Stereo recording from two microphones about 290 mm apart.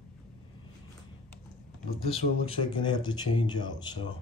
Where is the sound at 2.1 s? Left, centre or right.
Centre.